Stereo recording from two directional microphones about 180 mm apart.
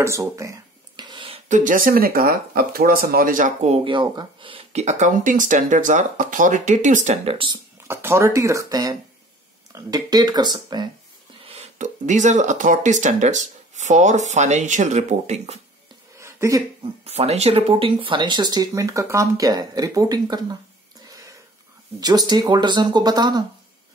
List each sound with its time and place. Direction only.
0.0 s a sound: 15° right (ahead or behind)
1.5 s speech: 45° right (ahead or behind)
7.9 s speech: 15° right (ahead or behind)
11.4 s speech: 35° right (ahead or behind)
16.2 s a sound: 15° right (ahead or behind)
17.0 s speech: 35° right (ahead or behind)
22.0 s speech: 20° right (ahead or behind)